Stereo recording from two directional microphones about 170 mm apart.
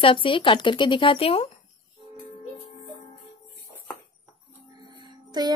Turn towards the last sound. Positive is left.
turn(degrees=-25)  # may be behind; listen again after turning